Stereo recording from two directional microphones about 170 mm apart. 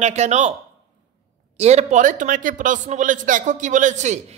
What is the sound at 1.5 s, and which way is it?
A man's voice, 40° right (ahead or behind).